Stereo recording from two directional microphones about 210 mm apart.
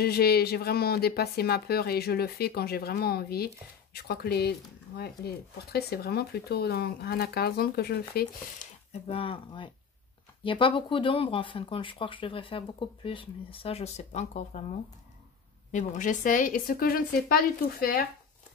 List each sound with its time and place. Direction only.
0.0 s speech: 50° left (ahead or behind)
8.9 s speech: 25° left (ahead or behind)
15.7 s a woman's voice: 35° left (ahead or behind)